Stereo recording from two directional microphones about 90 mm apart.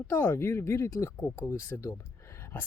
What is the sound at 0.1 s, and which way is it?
Speech, 25° left (ahead or behind).